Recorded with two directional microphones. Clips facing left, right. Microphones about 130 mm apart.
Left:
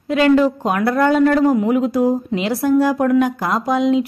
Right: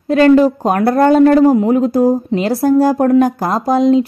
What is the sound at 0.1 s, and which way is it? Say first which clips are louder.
A woman's voice: right 5 dB; 40° right (ahead or behind).